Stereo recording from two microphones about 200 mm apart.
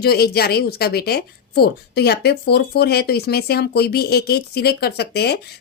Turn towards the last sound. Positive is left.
turn(degrees=55)  # may be behind; listen again after turning